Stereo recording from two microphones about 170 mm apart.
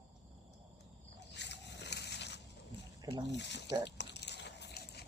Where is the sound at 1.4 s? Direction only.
90° left.